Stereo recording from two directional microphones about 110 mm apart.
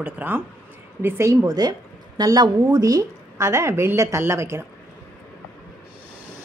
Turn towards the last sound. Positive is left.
turn(degrees=-25)  # may be behind; listen again after turning